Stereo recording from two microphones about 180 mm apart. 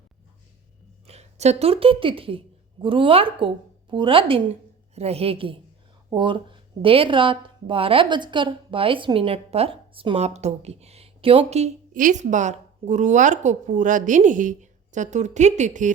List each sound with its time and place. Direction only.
1.0 s a woman's voice: 35° right (ahead or behind)